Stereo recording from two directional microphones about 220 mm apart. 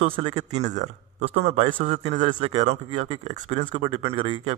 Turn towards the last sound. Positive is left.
turn(degrees=-25)  # may be behind; listen again after turning